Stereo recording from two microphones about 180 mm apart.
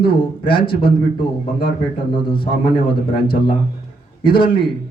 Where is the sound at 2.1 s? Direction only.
30° left (ahead or behind).